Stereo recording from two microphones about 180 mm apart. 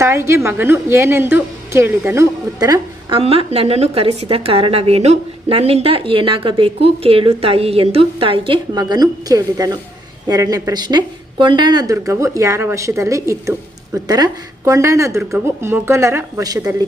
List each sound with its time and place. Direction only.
0.0 s speech: 15° right (ahead or behind)
3.2 s a woman's voice: 35° right (ahead or behind)